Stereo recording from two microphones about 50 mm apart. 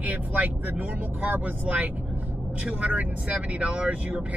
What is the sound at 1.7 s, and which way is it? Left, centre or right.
Speech, centre.